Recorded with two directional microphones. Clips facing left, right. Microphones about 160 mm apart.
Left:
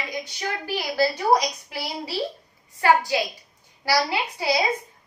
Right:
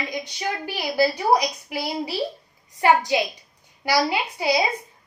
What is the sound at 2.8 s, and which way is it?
A woman's voice, 20° right (ahead or behind).